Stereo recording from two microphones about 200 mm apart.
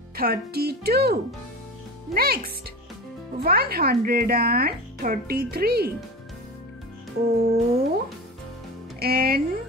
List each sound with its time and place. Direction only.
0.1 s speech: 50° right (ahead or behind)
2.1 s speech: 50° right (ahead or behind)
7.3 s speech: 50° right (ahead or behind)
9.0 s speech: 50° right (ahead or behind)